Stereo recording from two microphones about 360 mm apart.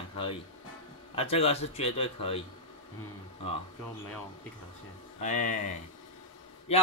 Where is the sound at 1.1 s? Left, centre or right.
Centre.